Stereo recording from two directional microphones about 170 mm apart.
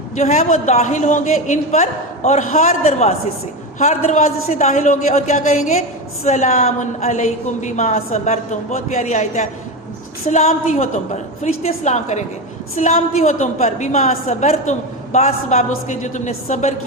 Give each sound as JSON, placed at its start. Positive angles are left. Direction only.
{"t": 0.2, "sound": "a woman's voice", "side_deg": 45}